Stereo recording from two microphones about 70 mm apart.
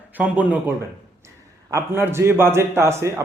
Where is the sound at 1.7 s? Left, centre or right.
Right.